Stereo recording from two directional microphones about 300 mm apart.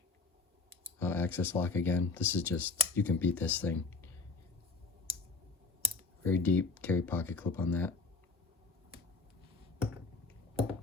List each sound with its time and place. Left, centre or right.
0.9 s speech: centre
6.2 s speech: centre
10.5 s a sound: centre